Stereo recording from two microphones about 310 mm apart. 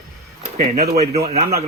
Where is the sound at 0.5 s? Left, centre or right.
Right.